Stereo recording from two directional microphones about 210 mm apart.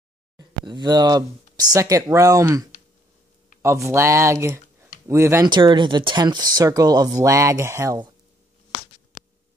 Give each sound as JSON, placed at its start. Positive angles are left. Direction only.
{"t": 0.4, "sound": "speech", "side_deg": -20}